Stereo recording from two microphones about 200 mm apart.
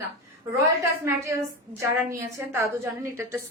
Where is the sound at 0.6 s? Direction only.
15° right (ahead or behind).